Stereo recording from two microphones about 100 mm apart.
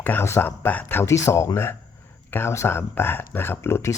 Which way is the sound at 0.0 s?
20° left (ahead or behind).